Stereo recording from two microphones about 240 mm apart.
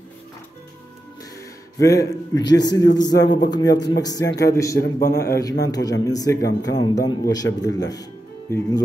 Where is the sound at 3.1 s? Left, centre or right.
Left.